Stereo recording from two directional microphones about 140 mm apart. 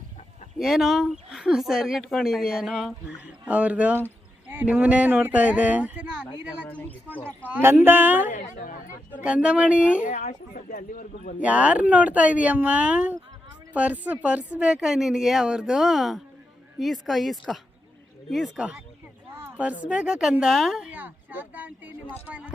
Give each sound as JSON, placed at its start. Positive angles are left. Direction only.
{"t": 0.6, "sound": "speech", "side_deg": 0}
{"t": 6.7, "sound": "speech", "side_deg": 10}
{"t": 7.3, "sound": "speech", "side_deg": -15}
{"t": 8.3, "sound": "speech", "side_deg": 65}
{"t": 9.2, "sound": "speech", "side_deg": -10}
{"t": 10.0, "sound": "speech", "side_deg": 65}
{"t": 11.3, "sound": "speech", "side_deg": -10}
{"t": 19.3, "sound": "a sound", "side_deg": -15}
{"t": 19.8, "sound": "speech", "side_deg": -5}
{"t": 20.9, "sound": "speech", "side_deg": -10}